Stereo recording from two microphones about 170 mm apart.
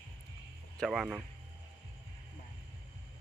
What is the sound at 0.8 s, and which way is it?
Speech, centre (ahead or behind).